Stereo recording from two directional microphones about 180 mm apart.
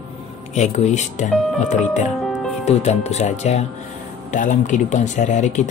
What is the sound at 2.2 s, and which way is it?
Music, 5° left (ahead or behind).